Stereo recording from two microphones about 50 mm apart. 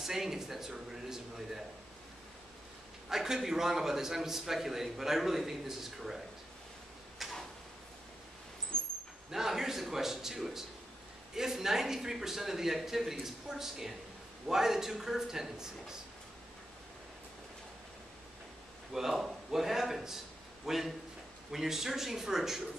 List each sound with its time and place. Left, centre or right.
0.0 s a man's voice: centre
3.1 s a man's voice: centre
7.2 s a sound: centre
8.7 s vehicle: centre
9.3 s a man's voice: centre
18.9 s a man's voice: centre